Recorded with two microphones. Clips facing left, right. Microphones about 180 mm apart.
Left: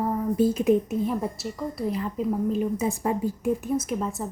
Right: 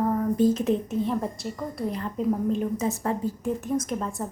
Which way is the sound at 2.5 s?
10° left (ahead or behind).